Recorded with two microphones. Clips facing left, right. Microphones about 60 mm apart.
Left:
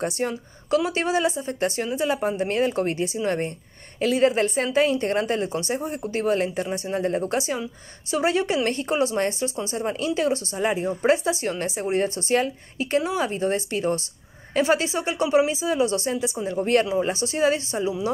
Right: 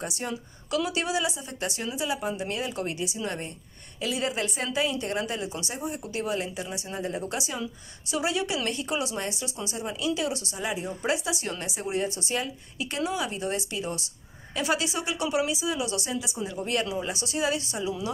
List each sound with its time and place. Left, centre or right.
0.0 s speech: left